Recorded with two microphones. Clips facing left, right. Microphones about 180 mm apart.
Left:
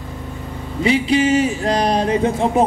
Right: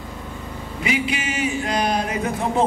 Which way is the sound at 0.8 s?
30° left (ahead or behind).